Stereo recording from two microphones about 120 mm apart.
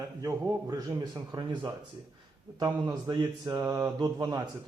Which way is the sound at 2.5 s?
35° right (ahead or behind).